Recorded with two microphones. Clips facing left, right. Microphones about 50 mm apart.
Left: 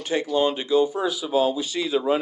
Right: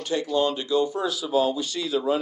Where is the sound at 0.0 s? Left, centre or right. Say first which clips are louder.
Left 2 dB; left.